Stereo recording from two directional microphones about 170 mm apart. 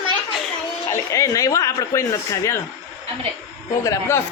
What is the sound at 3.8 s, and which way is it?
Speech, 20° left (ahead or behind).